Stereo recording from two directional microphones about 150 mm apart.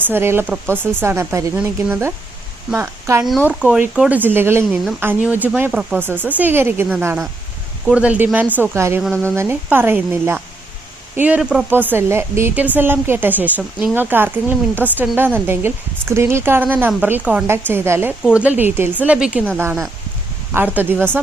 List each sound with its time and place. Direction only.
0.1 s a woman's voice: 15° right (ahead or behind)
18.2 s a woman's voice: 5° right (ahead or behind)
20.5 s speech: 20° right (ahead or behind)